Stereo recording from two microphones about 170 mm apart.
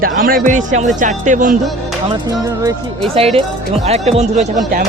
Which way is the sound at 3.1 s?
35° right (ahead or behind).